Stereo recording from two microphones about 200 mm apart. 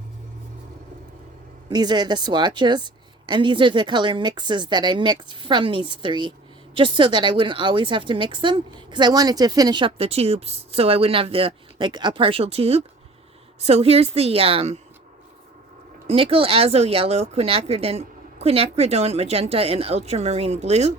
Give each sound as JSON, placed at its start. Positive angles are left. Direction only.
{"t": 1.7, "sound": "a woman's voice", "side_deg": -20}
{"t": 16.0, "sound": "speech", "side_deg": -30}